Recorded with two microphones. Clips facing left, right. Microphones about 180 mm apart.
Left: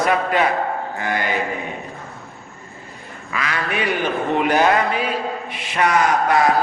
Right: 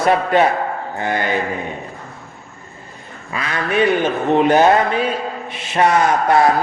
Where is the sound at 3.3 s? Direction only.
30° right (ahead or behind).